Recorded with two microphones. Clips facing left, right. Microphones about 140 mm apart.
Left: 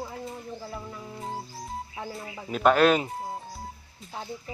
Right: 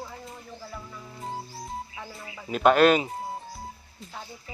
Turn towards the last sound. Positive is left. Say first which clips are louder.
# right 1 dB
turn(degrees=0)  # may be behind; listen again after turning